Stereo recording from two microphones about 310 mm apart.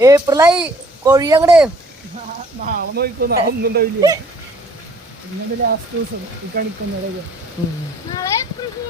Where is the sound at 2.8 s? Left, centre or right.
Right.